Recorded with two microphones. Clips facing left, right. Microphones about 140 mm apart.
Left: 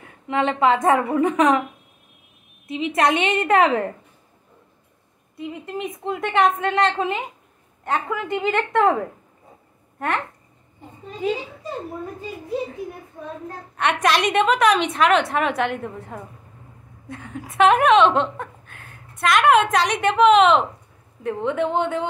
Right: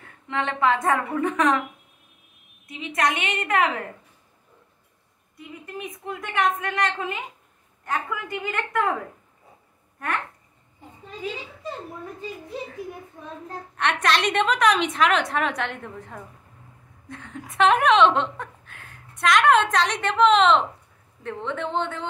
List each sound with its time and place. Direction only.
0.0 s a woman's voice: 20° left (ahead or behind)
2.7 s a woman's voice: 25° left (ahead or behind)
5.7 s a woman's voice: 25° left (ahead or behind)
13.7 s a woman's voice: 10° left (ahead or behind)